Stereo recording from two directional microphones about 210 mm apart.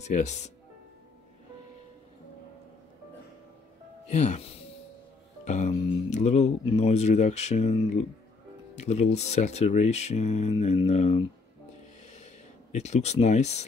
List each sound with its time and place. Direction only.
0.0 s speech: 35° left (ahead or behind)
4.1 s speech: 35° left (ahead or behind)
12.7 s speech: 30° left (ahead or behind)